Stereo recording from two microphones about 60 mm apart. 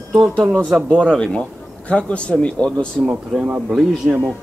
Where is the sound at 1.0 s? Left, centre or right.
Centre.